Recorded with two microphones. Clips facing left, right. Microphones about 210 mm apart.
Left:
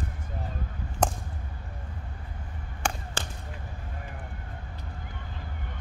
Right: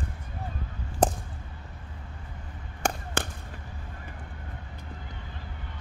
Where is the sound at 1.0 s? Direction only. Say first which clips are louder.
Right 3 dB; 35° right (ahead or behind).